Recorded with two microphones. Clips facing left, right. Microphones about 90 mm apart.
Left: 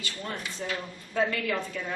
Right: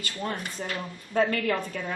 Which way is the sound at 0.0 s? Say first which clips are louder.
Right 3 dB; 45° right (ahead or behind).